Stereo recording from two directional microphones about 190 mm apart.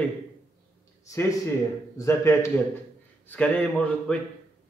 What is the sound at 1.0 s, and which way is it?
A man's voice, 15° left (ahead or behind).